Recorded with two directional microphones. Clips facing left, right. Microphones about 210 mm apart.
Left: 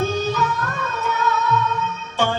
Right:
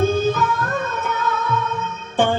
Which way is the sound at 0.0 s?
55° right (ahead or behind).